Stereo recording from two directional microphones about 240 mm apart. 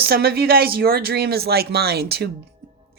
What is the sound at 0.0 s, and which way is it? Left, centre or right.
Speech, right.